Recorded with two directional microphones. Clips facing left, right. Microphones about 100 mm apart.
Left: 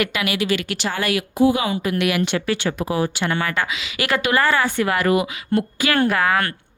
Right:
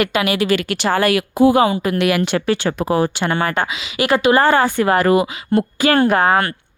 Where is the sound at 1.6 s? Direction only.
40° right (ahead or behind).